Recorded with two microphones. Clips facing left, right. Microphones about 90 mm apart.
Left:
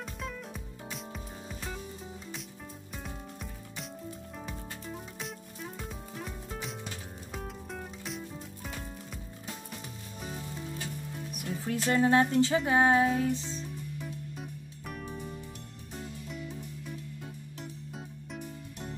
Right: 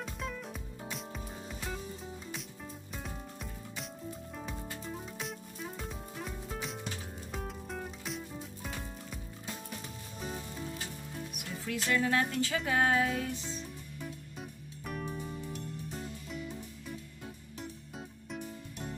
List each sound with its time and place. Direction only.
0.0 s music: centre (ahead or behind)
4.4 s music: centre (ahead or behind)
10.2 s sizzle: centre (ahead or behind)
11.3 s speech: 35° left (ahead or behind)
13.5 s music: centre (ahead or behind)
18.3 s music: centre (ahead or behind)